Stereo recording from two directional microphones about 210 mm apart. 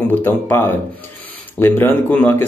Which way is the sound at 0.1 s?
10° left (ahead or behind).